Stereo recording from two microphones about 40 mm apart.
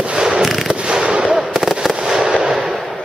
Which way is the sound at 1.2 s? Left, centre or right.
Centre.